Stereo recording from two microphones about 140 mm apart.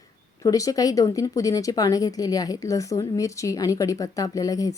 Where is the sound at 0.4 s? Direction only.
25° left (ahead or behind).